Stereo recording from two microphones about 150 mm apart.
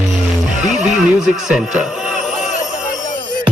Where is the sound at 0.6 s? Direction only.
5° right (ahead or behind).